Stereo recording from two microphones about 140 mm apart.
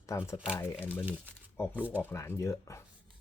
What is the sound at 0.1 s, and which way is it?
Speech, 25° left (ahead or behind).